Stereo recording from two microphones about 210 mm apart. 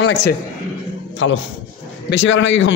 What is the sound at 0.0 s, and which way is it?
A man's voice, 60° left (ahead or behind).